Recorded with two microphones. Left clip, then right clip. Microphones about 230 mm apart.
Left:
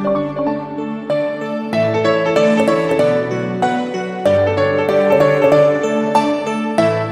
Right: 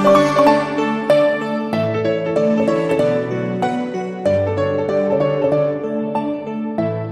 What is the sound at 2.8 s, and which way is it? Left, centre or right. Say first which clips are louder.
Music: left 2 dB; centre.